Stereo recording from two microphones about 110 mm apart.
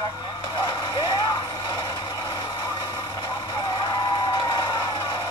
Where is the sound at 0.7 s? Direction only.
35° left (ahead or behind).